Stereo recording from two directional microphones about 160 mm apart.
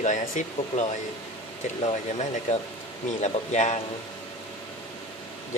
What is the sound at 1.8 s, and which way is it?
A man's voice, 45° left (ahead or behind).